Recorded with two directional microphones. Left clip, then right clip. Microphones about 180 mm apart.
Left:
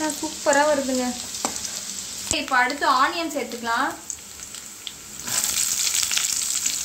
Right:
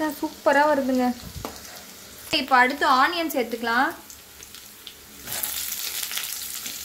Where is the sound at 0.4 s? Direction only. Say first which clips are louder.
Even; 20° right (ahead or behind).